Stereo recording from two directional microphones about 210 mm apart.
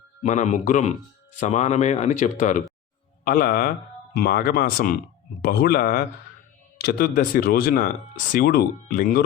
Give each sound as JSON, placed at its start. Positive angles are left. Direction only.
{"t": 0.2, "sound": "speech", "side_deg": 35}